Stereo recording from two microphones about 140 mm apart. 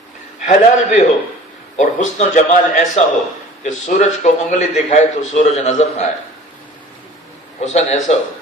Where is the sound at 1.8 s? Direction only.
60° left (ahead or behind).